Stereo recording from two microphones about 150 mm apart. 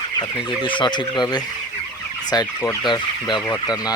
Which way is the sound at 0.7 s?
30° left (ahead or behind).